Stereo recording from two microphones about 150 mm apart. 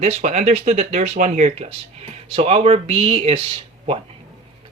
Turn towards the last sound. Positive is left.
turn(degrees=-40)  # may be behind; listen again after turning